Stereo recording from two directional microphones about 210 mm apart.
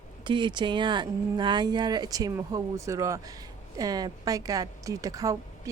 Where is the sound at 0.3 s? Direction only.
20° right (ahead or behind).